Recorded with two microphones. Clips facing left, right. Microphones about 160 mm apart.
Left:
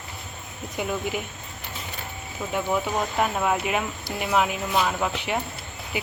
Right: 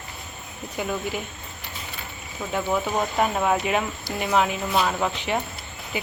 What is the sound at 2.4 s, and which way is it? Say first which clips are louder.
Speech: right 1 dB; 5° left (ahead or behind).